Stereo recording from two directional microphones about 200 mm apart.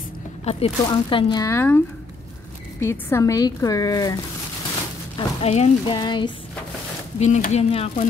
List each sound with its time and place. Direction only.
0.5 s speech: 25° left (ahead or behind); by 1.8 s 10° left (ahead or behind)
2.8 s a woman's voice: 15° left (ahead or behind)
5.1 s speech: 30° left (ahead or behind)
7.2 s speech: 35° left (ahead or behind)